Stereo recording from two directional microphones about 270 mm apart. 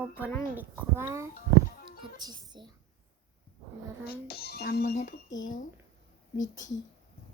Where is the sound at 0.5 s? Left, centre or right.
Centre.